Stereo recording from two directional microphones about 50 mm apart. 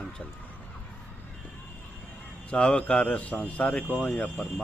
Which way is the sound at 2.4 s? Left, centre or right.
Left.